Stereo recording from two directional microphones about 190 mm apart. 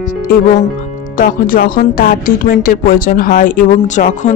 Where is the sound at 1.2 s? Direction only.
50° left (ahead or behind).